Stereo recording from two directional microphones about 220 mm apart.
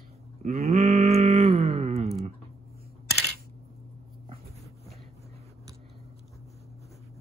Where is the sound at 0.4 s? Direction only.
30° right (ahead or behind).